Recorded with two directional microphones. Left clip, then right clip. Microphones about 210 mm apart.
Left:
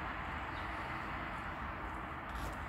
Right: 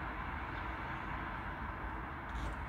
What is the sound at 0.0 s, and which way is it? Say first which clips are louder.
Vehicle: left 1 dB; 15° left (ahead or behind).